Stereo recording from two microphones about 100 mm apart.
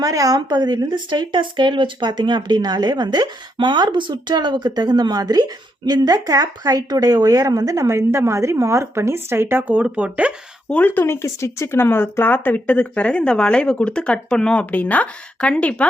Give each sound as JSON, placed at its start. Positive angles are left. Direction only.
{"t": 0.0, "sound": "speech", "side_deg": -35}
{"t": 10.7, "sound": "speech", "side_deg": 15}